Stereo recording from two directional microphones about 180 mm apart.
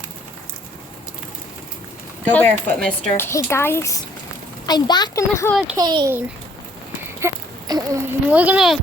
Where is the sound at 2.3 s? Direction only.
5° left (ahead or behind).